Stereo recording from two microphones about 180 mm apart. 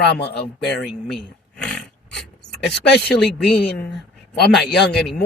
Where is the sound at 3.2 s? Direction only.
5° left (ahead or behind).